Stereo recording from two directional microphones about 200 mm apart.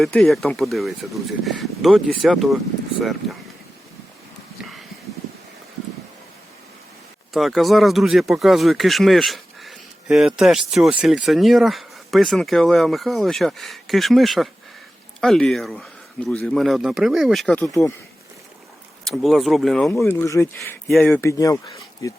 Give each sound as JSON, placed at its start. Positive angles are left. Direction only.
{"t": 0.0, "sound": "speech", "side_deg": 5}
{"t": 7.3, "sound": "speech", "side_deg": 0}
{"t": 19.0, "sound": "speech", "side_deg": 0}